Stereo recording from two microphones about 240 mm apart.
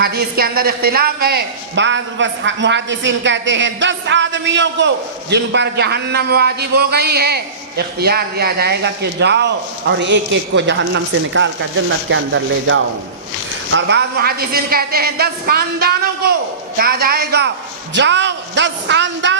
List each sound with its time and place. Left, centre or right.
0.0 s a man's voice: right